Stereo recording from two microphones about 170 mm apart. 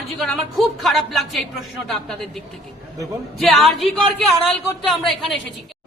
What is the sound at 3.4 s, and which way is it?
Speech, centre (ahead or behind).